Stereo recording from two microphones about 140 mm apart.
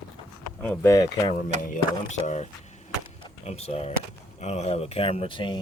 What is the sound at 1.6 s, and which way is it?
Speech, 65° left (ahead or behind).